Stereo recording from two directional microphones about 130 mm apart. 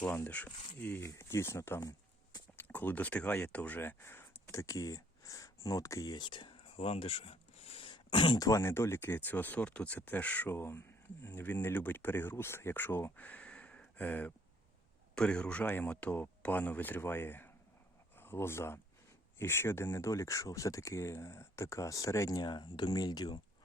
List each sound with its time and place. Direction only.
0.0 s speech: 15° left (ahead or behind)
2.6 s speech: 15° left (ahead or behind); by 23.4 s 30° left (ahead or behind)